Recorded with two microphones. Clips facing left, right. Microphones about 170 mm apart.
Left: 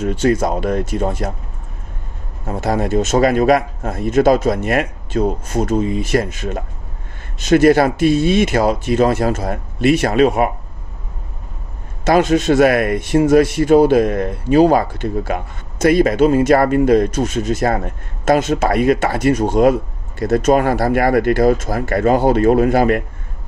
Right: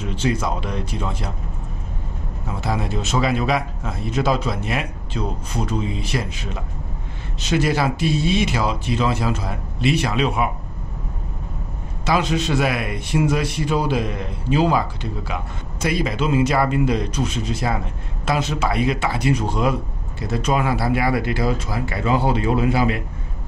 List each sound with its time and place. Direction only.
0.0 s speech: 45° left (ahead or behind)
2.4 s speech: 45° left (ahead or behind)
12.1 s speech: 50° left (ahead or behind)